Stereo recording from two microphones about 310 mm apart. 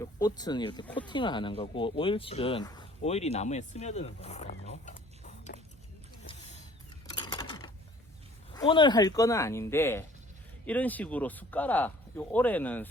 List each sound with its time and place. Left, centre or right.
0.0 s speech: centre
7.1 s a sound: centre
8.5 s speech: centre